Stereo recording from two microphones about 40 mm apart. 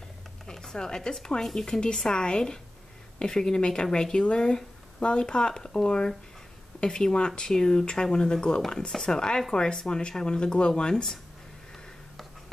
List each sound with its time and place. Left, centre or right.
0.5 s speech: centre